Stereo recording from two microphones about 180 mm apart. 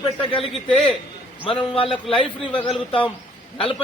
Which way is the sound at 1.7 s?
30° left (ahead or behind).